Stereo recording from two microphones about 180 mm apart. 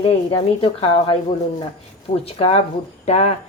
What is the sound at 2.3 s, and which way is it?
Speech, 35° left (ahead or behind).